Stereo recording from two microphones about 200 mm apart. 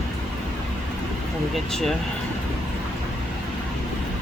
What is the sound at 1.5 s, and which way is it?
Speech, centre (ahead or behind).